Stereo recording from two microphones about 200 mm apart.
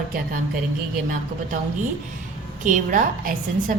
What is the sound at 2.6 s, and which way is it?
A woman's voice, 40° right (ahead or behind).